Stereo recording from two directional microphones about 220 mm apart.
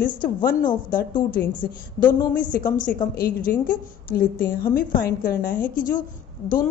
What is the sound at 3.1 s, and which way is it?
A woman's voice, 40° left (ahead or behind).